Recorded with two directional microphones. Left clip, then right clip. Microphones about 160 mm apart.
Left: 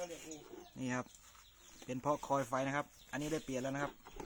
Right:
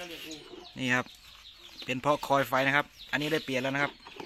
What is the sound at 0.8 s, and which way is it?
A man's voice, 20° right (ahead or behind).